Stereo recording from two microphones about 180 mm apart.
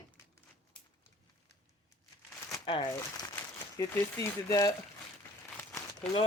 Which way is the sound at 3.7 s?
15° left (ahead or behind).